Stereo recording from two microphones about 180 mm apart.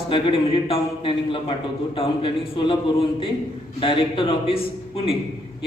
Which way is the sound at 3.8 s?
30° left (ahead or behind).